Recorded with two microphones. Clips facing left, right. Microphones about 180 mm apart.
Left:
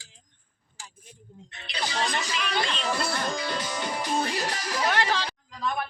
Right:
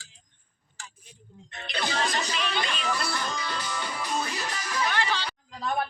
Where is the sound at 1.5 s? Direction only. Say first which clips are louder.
Right 2 dB; 45° right (ahead or behind).